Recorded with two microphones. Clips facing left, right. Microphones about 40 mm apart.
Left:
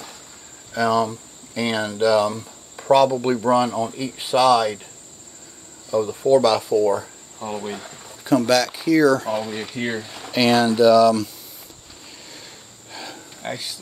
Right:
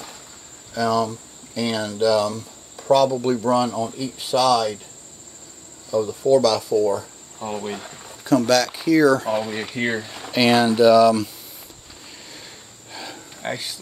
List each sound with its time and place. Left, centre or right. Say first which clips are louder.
0.7 s speech: left 1 dB; left
5.9 s speech: even; left
7.3 s speech: even; centre
8.2 s speech: even; centre
9.3 s speech: right 1 dB; right
10.5 s speech: even; centre
12.9 s cricket: even; centre
13.4 s speech: right 2 dB; right